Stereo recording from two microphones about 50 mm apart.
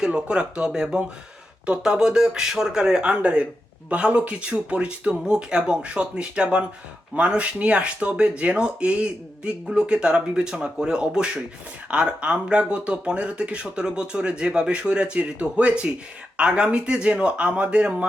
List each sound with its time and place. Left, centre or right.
0.0 s speech: centre